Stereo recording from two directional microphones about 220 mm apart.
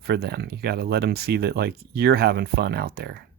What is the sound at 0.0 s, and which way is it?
Speech, 45° right (ahead or behind).